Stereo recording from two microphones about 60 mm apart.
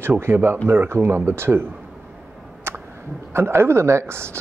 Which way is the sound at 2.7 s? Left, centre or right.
Right.